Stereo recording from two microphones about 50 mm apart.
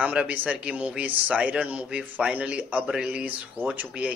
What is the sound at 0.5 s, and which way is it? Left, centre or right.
Speech, right.